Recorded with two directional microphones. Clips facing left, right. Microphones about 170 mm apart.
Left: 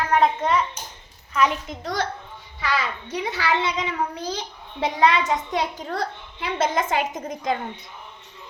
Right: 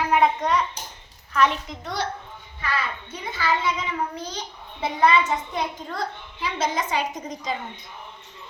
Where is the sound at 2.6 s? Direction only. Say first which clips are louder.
Left 3 dB; 90° left; by 3.9 s 70° left (ahead or behind).